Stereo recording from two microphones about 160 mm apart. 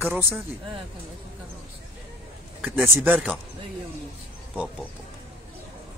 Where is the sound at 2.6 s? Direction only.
10° right (ahead or behind).